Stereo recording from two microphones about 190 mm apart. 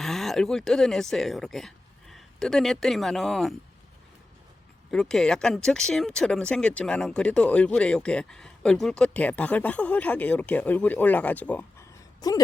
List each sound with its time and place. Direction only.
0.0 s speech: centre (ahead or behind)
4.9 s speech: 5° left (ahead or behind)
12.2 s a woman's voice: 20° left (ahead or behind)